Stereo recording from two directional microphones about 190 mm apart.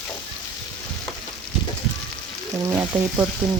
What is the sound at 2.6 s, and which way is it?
Frying, 15° right (ahead or behind).